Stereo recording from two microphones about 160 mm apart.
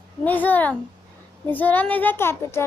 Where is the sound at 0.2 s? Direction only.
10° left (ahead or behind).